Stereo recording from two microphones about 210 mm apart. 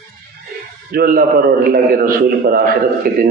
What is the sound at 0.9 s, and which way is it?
A man's voice, 45° right (ahead or behind).